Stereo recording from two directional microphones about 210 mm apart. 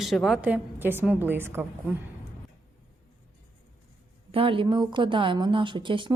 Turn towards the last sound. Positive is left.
turn(degrees=-25)  # may be behind; listen again after turning